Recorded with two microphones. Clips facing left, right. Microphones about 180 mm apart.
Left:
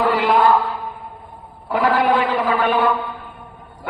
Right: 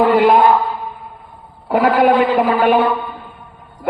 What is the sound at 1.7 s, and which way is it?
Speech, 50° right (ahead or behind).